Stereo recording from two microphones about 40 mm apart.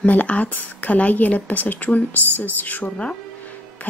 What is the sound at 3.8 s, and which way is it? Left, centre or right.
Music, left.